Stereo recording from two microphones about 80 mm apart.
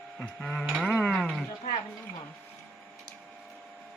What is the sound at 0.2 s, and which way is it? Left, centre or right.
Music, centre.